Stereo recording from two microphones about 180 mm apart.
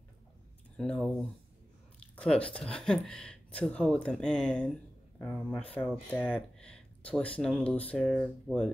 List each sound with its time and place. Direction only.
0.7 s speech: 5° left (ahead or behind)
2.1 s speech: 5° left (ahead or behind)